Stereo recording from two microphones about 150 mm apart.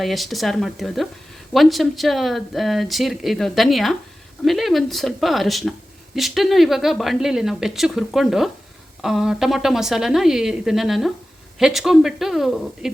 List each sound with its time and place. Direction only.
0.0 s speech: centre (ahead or behind)